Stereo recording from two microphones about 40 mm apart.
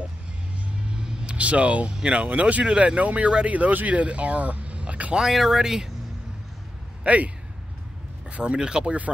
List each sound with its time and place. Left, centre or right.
0.7 s vehicle: right
2.0 s speech: right
3.0 s speech: right
5.1 s speech: centre
8.3 s speech: right